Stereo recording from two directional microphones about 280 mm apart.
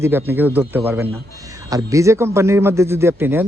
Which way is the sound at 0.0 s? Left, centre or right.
Centre.